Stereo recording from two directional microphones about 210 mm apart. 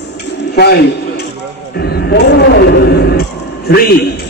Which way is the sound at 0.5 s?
50° left (ahead or behind).